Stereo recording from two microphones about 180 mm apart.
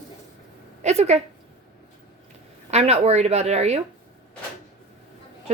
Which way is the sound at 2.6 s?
35° right (ahead or behind).